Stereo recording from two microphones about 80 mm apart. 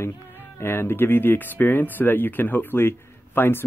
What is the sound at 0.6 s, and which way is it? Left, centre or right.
Speech, left.